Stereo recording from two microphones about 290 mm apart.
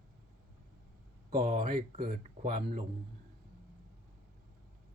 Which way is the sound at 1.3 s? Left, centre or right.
Centre.